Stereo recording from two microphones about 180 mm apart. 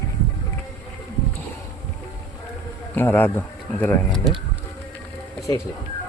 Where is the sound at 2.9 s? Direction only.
10° left (ahead or behind).